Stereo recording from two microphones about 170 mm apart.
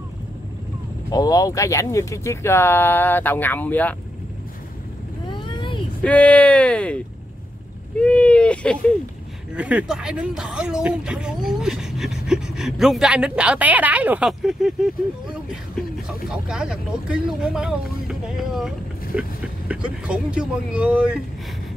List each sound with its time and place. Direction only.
1.1 s speech: 20° left (ahead or behind)
5.3 s vehicle: 30° left (ahead or behind)
6.0 s speech: 5° left (ahead or behind)
8.0 s speech: 5° left (ahead or behind)
9.6 s speech: 5° right (ahead or behind)
19.1 s vehicle: 10° right (ahead or behind)
19.7 s speech: 5° right (ahead or behind)